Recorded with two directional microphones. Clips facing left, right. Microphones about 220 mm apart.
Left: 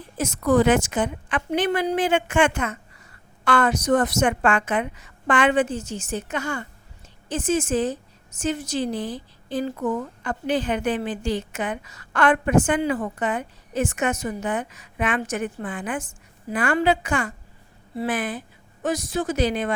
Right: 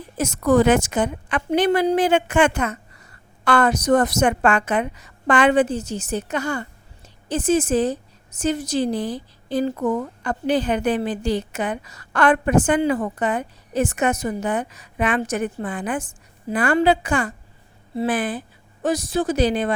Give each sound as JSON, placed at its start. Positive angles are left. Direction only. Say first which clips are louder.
{"t": 0.2, "sound": "a woman's voice", "louder": "right 2 dB", "side_deg": -45}